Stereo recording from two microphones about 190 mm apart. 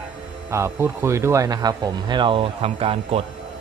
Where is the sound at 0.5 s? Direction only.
15° right (ahead or behind); by 3.2 s 30° right (ahead or behind).